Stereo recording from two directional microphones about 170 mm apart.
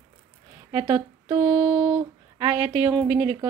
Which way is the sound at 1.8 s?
10° right (ahead or behind).